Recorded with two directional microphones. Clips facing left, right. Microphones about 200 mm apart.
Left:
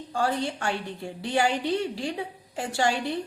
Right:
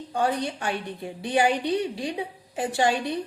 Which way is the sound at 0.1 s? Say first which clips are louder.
Right 1 dB; 20° right (ahead or behind).